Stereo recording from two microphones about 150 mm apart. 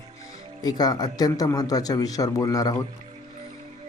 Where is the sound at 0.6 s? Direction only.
25° left (ahead or behind).